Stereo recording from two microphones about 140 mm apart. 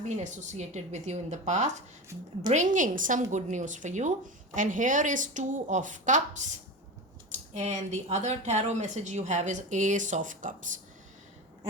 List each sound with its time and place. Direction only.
0.2 s speech: 55° right (ahead or behind)